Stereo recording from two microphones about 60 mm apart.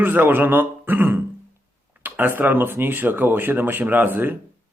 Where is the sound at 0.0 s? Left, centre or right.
Right.